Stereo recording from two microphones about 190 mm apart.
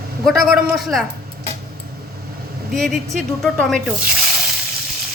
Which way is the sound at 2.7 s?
Centre (ahead or behind).